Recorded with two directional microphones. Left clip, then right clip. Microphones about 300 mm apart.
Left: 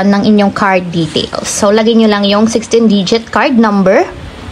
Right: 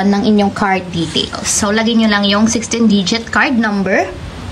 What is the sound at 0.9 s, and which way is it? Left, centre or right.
A woman's voice, centre.